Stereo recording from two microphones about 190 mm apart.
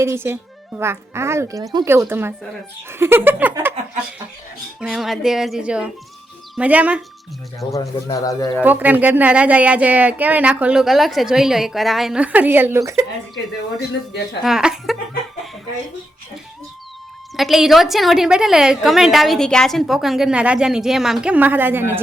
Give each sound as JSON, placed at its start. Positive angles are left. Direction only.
{"t": 0.0, "sound": "speech", "side_deg": -15}
{"t": 4.8, "sound": "a woman's voice", "side_deg": 0}
{"t": 7.7, "sound": "speech", "side_deg": 15}
{"t": 8.6, "sound": "speech", "side_deg": -10}
{"t": 14.4, "sound": "a woman's voice", "side_deg": -5}
{"t": 17.3, "sound": "a woman's voice", "side_deg": 0}